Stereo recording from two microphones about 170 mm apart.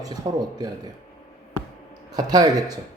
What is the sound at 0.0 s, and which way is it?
Speech, 20° right (ahead or behind).